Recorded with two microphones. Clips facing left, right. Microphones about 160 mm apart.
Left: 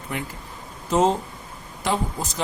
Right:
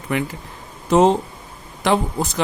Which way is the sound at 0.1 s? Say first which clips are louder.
Right 8 dB; 90° right.